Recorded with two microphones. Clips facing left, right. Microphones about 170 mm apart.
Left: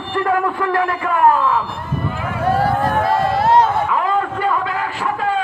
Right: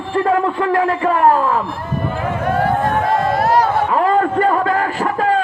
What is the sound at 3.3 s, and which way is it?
Chatter, 25° left (ahead or behind).